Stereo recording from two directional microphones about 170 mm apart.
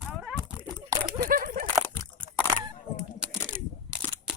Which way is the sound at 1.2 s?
55° right (ahead or behind).